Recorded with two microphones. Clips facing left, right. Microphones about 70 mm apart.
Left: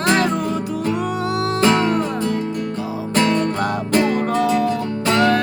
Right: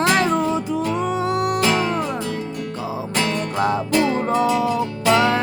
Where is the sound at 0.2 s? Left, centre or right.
Right.